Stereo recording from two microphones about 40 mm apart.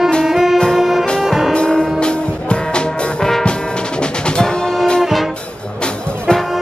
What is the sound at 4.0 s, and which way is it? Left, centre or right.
Music, left.